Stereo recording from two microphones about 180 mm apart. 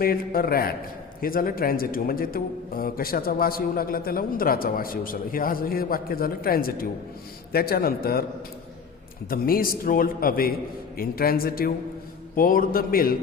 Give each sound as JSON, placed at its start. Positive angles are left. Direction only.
{"t": 0.0, "sound": "a man's voice", "side_deg": 55}
{"t": 9.3, "sound": "a man's voice", "side_deg": 55}